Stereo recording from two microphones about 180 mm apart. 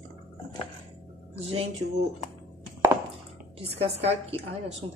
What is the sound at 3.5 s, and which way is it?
A woman's voice, 35° right (ahead or behind).